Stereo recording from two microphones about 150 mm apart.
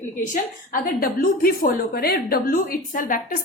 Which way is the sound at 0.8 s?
75° left (ahead or behind).